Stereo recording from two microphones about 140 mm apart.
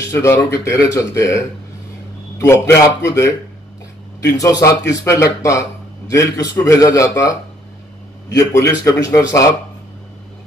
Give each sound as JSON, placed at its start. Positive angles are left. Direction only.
{"t": 0.0, "sound": "speech", "side_deg": 20}
{"t": 4.3, "sound": "speech", "side_deg": 20}
{"t": 8.4, "sound": "speech", "side_deg": 20}